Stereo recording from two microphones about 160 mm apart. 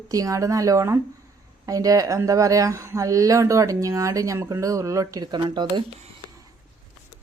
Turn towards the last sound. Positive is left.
turn(degrees=-25)  # may be behind; listen again after turning